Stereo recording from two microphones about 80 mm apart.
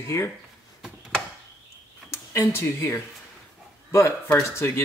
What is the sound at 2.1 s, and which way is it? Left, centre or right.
Speech, left.